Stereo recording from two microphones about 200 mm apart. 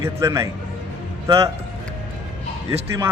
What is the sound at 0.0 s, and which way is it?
Speech, 15° right (ahead or behind).